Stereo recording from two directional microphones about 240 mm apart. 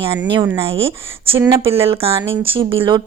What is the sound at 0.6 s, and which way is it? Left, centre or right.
Speech, right.